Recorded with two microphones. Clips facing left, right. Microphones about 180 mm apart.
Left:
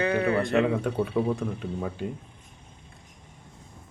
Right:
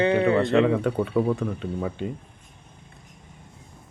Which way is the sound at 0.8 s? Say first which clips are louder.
Right 3 dB; 5° left (ahead or behind).